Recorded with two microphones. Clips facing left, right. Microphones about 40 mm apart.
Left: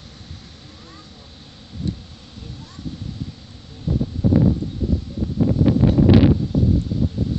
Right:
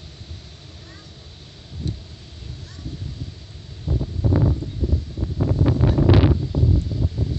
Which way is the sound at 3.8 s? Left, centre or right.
Centre.